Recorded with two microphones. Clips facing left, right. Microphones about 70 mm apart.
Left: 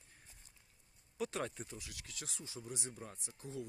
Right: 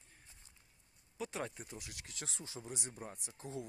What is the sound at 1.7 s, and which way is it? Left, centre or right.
Speech, right.